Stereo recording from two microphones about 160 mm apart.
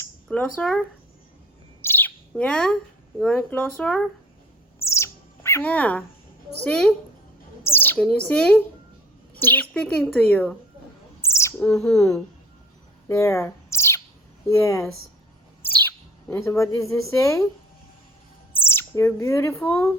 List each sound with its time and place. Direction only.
0.3 s speech: 5° left (ahead or behind)
1.8 s chirp: 15° left (ahead or behind)
2.3 s speech: 5° left (ahead or behind)
4.8 s bird: 15° left (ahead or behind)
6.7 s speech: 5° left (ahead or behind)
11.2 s bird: 15° left (ahead or behind)
13.1 s bird: 15° left (ahead or behind)
14.4 s speech: 20° left (ahead or behind)
15.6 s bird: 15° left (ahead or behind)
16.3 s a woman's voice: 15° left (ahead or behind)
18.5 s speech: 15° left (ahead or behind)